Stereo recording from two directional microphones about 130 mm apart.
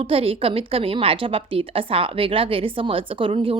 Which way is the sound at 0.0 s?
45° right (ahead or behind).